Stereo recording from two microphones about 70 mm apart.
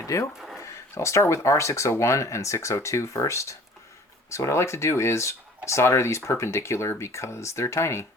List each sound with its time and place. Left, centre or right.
0.0 s speech: left
0.3 s a sound: centre
0.6 s speech: left